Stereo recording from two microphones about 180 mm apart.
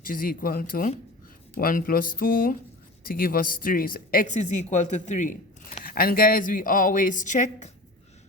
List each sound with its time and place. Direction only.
0.0 s speech: 50° left (ahead or behind)